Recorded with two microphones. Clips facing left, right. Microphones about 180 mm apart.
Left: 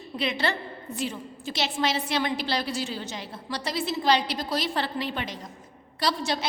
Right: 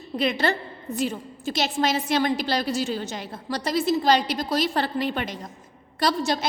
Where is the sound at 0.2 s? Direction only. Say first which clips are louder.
Right 4 dB; 45° right (ahead or behind).